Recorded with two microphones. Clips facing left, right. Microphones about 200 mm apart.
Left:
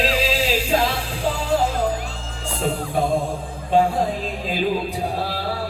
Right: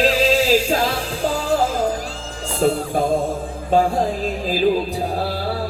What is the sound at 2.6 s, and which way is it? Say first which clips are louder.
Speech: right 4 dB; 40° right (ahead or behind).